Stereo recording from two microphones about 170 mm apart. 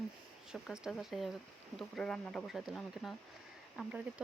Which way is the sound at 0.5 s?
Centre (ahead or behind).